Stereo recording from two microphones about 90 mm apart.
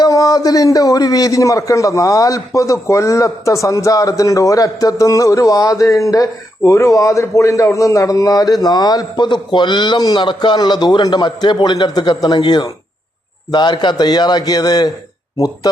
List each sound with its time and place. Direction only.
0.0 s a man's voice: 40° left (ahead or behind)